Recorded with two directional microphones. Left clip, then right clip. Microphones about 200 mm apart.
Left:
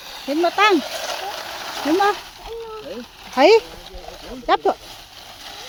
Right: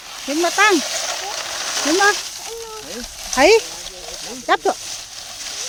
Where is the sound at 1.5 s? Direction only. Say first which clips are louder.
Right 2 dB; 25° right (ahead or behind).